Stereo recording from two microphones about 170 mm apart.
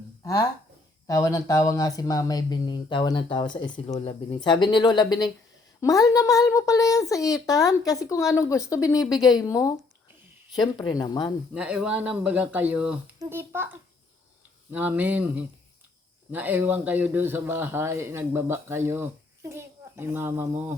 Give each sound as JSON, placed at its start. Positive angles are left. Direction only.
{"t": 1.0, "sound": "speech", "side_deg": 20}
{"t": 11.5, "sound": "a child's voice", "side_deg": -5}